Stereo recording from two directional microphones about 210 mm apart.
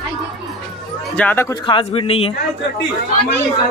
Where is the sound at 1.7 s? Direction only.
25° left (ahead or behind).